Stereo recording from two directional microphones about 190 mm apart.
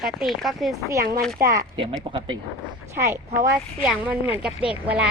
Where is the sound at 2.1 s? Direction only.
25° right (ahead or behind).